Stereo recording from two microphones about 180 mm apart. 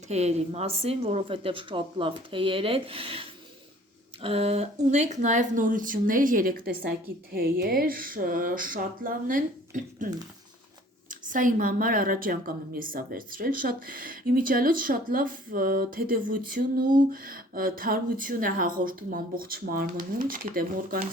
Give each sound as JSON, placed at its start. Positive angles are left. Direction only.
{"t": 0.1, "sound": "a woman's voice", "side_deg": -40}
{"t": 11.1, "sound": "a woman's voice", "side_deg": -45}